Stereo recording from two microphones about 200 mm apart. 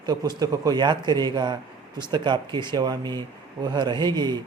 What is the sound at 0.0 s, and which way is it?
Speech, 20° right (ahead or behind).